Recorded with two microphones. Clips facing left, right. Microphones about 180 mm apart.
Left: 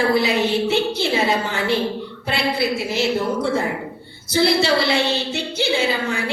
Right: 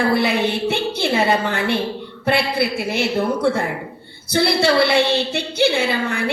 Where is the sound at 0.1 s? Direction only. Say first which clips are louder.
Even; 60° right (ahead or behind).